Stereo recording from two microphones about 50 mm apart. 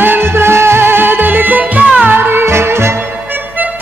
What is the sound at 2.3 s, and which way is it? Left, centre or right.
Music, right.